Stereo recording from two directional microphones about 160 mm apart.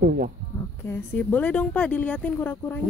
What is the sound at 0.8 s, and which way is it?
Speech, 10° left (ahead or behind).